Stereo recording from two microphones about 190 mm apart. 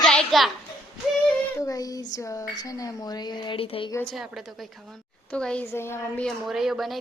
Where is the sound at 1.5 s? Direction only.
20° left (ahead or behind).